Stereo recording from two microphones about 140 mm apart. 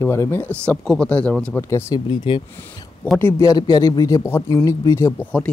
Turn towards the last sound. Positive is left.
turn(degrees=20)  # may be behind; listen again after turning